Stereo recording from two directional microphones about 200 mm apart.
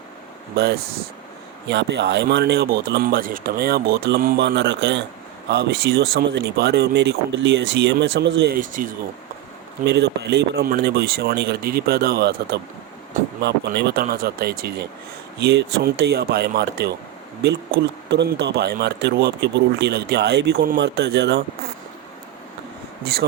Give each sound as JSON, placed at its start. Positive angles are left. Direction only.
{"t": 0.5, "sound": "speech", "side_deg": -60}
{"t": 8.5, "sound": "speech", "side_deg": -45}
{"t": 9.8, "sound": "speech", "side_deg": -55}